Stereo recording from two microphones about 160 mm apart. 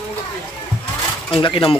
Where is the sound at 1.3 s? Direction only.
35° left (ahead or behind).